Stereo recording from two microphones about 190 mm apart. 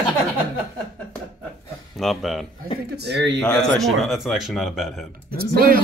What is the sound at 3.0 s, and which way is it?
Speech, 65° right (ahead or behind).